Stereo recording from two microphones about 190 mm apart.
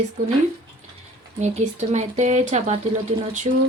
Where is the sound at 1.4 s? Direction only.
35° right (ahead or behind).